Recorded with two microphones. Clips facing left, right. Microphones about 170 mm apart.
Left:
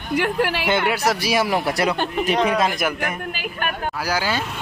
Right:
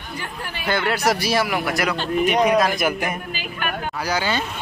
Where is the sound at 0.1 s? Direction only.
80° left.